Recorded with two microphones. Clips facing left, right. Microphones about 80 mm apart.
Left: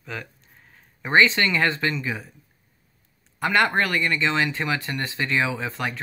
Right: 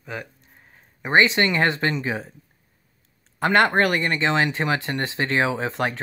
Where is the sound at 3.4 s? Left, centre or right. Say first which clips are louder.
Right 3 dB; right.